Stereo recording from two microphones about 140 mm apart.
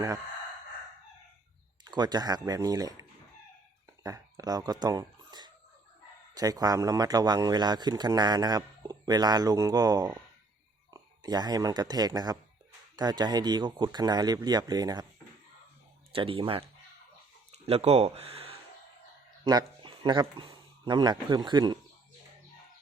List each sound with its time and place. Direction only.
1.8 s a man's voice: 30° right (ahead or behind)
16.1 s speech: 40° right (ahead or behind)
19.5 s speech: 30° right (ahead or behind)